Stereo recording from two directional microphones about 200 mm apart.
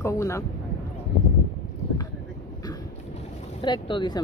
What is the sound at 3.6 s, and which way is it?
Speech, 20° left (ahead or behind).